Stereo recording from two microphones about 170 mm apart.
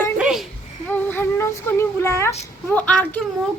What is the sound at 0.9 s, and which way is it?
Child singing, 10° left (ahead or behind).